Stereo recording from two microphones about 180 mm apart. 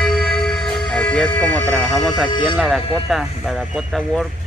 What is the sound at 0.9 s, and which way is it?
Speech, 5° left (ahead or behind).